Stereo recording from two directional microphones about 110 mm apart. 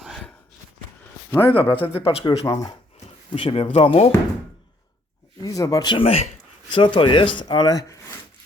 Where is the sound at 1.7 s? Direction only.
60° left (ahead or behind).